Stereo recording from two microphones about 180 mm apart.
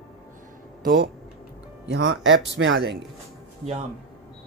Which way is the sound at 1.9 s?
75° right (ahead or behind).